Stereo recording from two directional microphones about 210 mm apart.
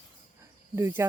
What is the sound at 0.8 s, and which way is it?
Speech, 10° right (ahead or behind).